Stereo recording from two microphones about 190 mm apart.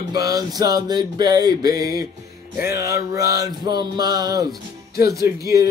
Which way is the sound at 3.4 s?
20° right (ahead or behind).